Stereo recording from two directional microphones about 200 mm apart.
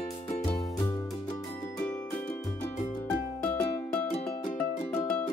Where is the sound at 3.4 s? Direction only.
5° left (ahead or behind).